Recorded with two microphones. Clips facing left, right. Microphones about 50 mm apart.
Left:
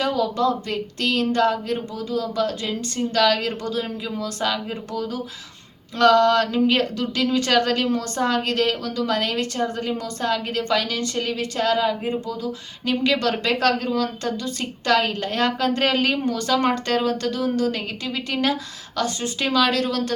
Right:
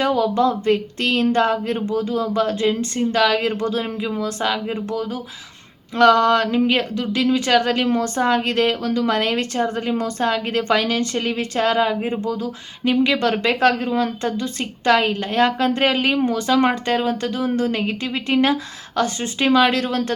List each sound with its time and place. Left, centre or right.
0.0 s speech: right
7.9 s speech: right
12.8 s speech: right